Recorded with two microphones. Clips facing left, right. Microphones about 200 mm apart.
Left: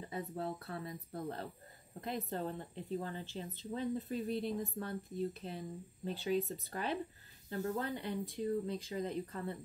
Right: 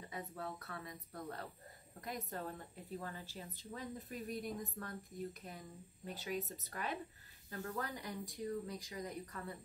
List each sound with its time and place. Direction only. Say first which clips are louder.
0.0 s speech: left 6 dB; 30° left (ahead or behind)